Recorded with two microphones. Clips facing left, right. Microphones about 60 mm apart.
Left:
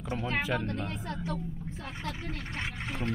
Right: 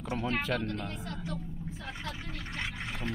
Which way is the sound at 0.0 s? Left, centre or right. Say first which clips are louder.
Right 1 dB; centre.